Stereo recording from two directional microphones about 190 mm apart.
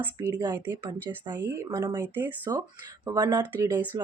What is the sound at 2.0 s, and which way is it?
Speech, 10° right (ahead or behind).